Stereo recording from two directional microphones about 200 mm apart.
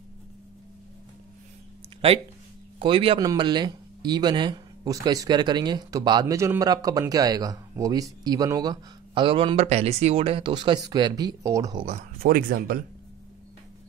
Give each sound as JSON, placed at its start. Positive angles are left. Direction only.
{"t": 2.0, "sound": "speech", "side_deg": -25}
{"t": 11.8, "sound": "speech", "side_deg": -35}
{"t": 12.3, "sound": "speech", "side_deg": -45}